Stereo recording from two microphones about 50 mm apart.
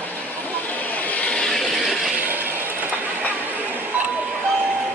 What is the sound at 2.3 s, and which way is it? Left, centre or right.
Vehicle, right.